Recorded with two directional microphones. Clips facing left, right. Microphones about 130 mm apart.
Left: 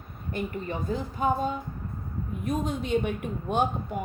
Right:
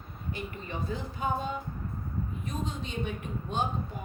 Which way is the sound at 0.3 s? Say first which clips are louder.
Left 7 dB; 45° left (ahead or behind).